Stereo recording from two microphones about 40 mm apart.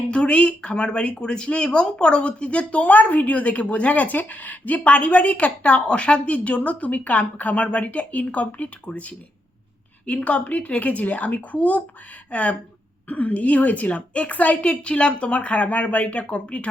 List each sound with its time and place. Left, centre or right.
0.1 s speech: left
2.8 s a woman's voice: left